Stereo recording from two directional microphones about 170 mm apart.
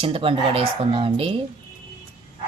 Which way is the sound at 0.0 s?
30° right (ahead or behind).